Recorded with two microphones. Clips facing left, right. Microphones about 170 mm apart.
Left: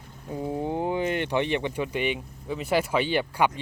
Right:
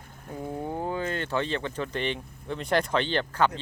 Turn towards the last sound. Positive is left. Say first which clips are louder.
# left 1 dB
turn(degrees=10)  # may be behind; listen again after turning